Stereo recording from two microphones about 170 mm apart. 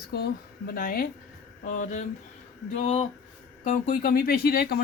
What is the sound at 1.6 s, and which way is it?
Speech, 45° left (ahead or behind).